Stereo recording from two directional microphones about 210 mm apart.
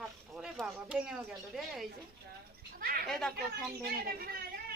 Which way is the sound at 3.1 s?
5° left (ahead or behind).